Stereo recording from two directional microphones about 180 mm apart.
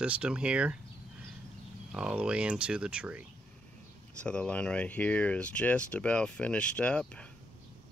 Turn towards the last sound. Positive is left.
turn(degrees=5)  # may be behind; listen again after turning